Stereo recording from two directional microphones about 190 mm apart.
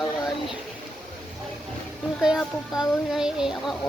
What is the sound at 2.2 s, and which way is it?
Speech, 5° right (ahead or behind).